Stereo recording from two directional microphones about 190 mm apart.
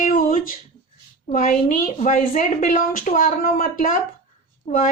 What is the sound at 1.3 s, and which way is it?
A woman's voice, 40° left (ahead or behind).